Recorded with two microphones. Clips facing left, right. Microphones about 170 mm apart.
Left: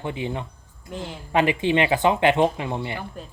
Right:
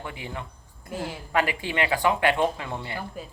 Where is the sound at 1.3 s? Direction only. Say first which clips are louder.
Left 6 dB; 20° left (ahead or behind).